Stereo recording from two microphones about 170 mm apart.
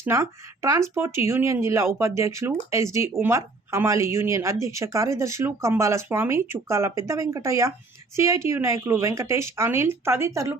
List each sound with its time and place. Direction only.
0.0 s speech: 15° right (ahead or behind)